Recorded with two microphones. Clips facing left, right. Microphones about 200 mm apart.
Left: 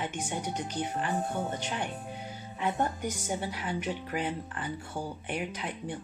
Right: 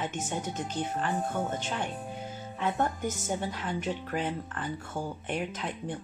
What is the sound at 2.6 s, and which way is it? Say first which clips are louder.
Speech: right 1 dB; 15° left (ahead or behind).